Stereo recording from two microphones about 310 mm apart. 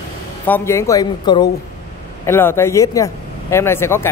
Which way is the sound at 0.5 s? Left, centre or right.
Centre.